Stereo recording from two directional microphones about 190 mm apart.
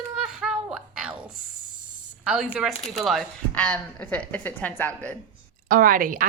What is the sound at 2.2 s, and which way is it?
A woman's voice, 5° right (ahead or behind).